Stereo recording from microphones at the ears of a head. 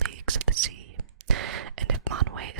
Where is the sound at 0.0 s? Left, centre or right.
Right.